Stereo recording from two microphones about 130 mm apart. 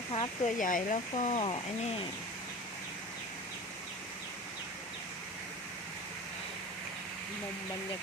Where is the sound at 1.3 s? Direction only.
45° left (ahead or behind).